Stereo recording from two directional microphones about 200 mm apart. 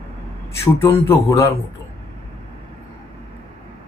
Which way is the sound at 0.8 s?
15° left (ahead or behind).